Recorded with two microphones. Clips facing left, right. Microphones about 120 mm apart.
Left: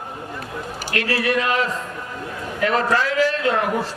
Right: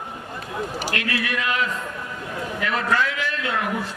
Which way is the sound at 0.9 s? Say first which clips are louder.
Left 8 dB; 35° left (ahead or behind).